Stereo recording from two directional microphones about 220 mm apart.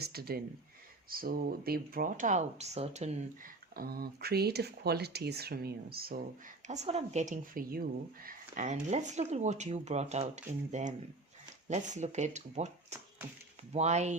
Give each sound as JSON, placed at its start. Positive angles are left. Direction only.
{"t": 0.0, "sound": "speech", "side_deg": -45}
{"t": 3.8, "sound": "speech", "side_deg": -45}
{"t": 6.7, "sound": "speech", "side_deg": -30}